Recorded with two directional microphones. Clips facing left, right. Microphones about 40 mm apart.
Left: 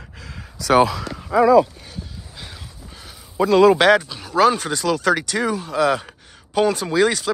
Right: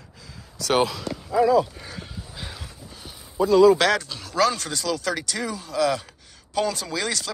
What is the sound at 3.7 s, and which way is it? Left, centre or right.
Speech, left.